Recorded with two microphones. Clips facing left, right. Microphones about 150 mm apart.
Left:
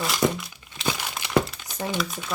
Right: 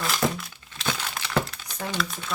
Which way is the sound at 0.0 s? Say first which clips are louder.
Left 2 dB; centre (ahead or behind).